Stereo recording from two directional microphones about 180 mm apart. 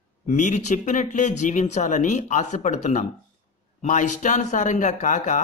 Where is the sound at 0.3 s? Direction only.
40° left (ahead or behind).